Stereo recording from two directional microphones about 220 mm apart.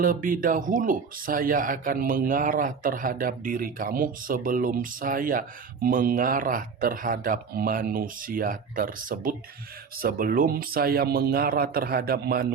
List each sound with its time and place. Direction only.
0.0 s speech: 40° right (ahead or behind)